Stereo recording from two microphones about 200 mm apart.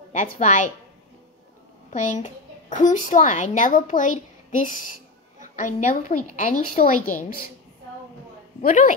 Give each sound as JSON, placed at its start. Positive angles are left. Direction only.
{"t": 0.1, "sound": "a woman's voice", "side_deg": 35}
{"t": 1.9, "sound": "a woman's voice", "side_deg": 35}
{"t": 5.4, "sound": "a woman's voice", "side_deg": 40}
{"t": 8.6, "sound": "a woman's voice", "side_deg": 40}